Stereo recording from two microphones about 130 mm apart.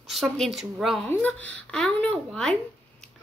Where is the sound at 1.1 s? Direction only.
10° left (ahead or behind).